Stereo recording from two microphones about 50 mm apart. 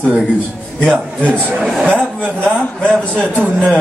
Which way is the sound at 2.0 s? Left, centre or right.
Centre.